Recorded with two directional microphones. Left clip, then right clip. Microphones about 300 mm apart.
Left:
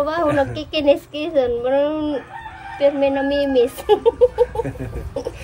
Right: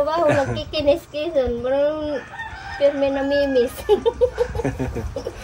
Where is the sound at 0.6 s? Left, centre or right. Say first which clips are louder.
Left 2 dB; centre.